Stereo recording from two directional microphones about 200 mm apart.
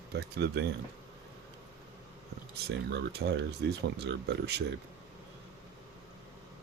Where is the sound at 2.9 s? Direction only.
60° right (ahead or behind).